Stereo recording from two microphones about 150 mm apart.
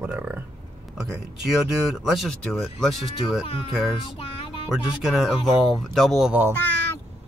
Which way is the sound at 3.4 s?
40° left (ahead or behind).